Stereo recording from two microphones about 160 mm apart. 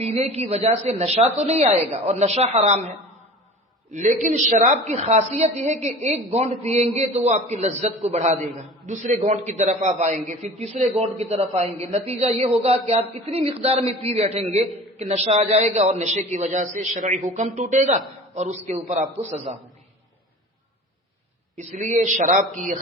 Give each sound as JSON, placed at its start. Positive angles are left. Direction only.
{"t": 0.0, "sound": "a man's voice", "side_deg": -40}
{"t": 3.9, "sound": "a man's voice", "side_deg": -50}
{"t": 21.5, "sound": "a man's voice", "side_deg": -45}